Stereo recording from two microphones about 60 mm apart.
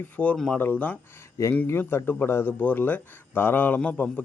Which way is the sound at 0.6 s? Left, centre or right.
Left.